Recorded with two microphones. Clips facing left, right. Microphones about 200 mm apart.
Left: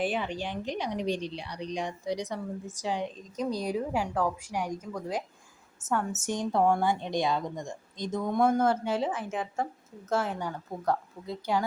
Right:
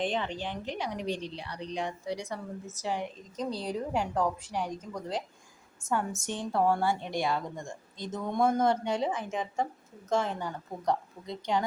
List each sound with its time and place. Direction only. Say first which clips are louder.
0.0 s a woman's voice: left 1 dB; 10° left (ahead or behind)
5.8 s a woman's voice: left 1 dB; centre (ahead or behind)
6.1 s a woman's voice: left 3 dB; 10° left (ahead or behind)